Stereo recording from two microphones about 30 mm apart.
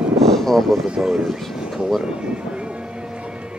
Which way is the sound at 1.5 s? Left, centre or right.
Right.